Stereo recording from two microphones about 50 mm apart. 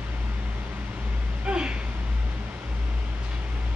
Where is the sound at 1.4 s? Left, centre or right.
Right.